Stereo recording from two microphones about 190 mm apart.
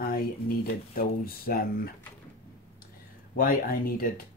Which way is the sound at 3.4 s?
50° left (ahead or behind).